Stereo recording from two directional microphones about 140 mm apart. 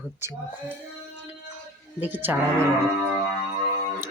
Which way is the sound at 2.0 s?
15° right (ahead or behind).